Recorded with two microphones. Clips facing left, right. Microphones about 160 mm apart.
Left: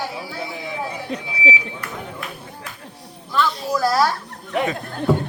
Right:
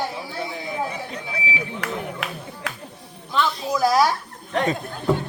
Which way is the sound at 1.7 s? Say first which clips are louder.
Right 3 dB; 90° right.